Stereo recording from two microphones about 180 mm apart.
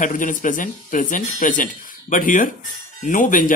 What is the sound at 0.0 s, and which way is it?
Speech, 45° left (ahead or behind).